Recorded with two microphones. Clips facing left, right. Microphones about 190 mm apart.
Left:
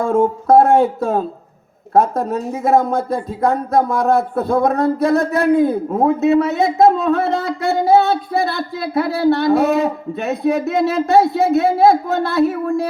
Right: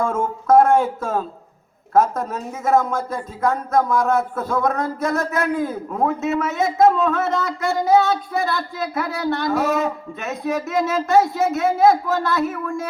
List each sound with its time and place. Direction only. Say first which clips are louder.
0.0 s speech: left 6 dB; 35° left (ahead or behind)